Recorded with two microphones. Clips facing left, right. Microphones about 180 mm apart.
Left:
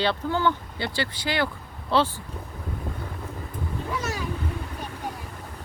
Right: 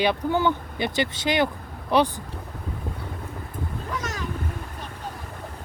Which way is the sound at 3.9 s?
10° left (ahead or behind).